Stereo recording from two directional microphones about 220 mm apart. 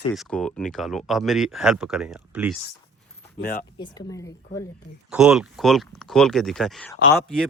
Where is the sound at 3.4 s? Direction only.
40° left (ahead or behind).